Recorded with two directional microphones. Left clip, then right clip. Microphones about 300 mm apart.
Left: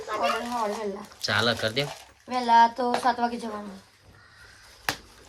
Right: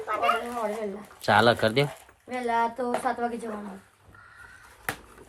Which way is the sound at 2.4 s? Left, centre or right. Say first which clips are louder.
Left 7 dB; centre.